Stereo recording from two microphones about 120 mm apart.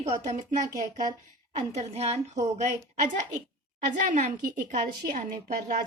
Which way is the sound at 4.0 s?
85° right.